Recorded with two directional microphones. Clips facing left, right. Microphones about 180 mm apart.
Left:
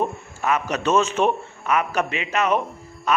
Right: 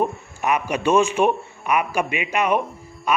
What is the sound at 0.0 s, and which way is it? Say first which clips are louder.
Speech: right 2 dB; 15° right (ahead or behind).